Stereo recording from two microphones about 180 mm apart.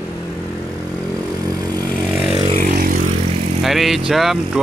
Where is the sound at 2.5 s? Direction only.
50° right (ahead or behind).